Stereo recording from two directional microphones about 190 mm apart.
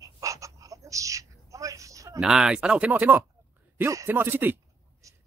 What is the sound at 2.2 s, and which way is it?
A man's voice, 5° right (ahead or behind).